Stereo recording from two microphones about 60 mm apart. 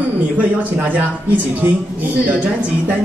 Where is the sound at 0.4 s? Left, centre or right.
Right.